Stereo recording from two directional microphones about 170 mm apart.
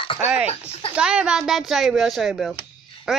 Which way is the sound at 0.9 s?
5° right (ahead or behind).